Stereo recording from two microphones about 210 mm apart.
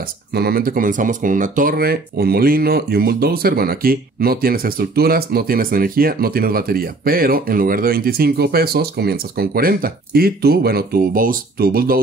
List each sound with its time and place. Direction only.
0.3 s speech: 50° right (ahead or behind)